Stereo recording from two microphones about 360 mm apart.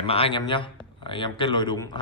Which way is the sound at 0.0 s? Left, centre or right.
Centre.